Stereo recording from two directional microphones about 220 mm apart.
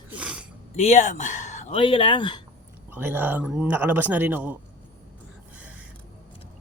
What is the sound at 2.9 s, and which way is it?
Speech, 10° right (ahead or behind).